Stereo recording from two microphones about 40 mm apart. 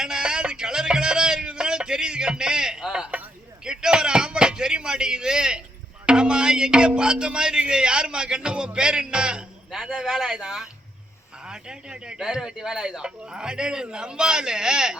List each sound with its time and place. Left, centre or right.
0.0 s music: centre
3.6 s speech: centre
6.1 s music: right
7.7 s a man's voice: right
9.9 s speech: centre
10.2 s a man's voice: centre